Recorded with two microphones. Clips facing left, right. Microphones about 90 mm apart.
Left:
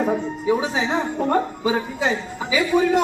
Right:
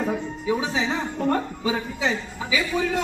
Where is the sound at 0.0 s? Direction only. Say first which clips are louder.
Left 5 dB; 20° left (ahead or behind).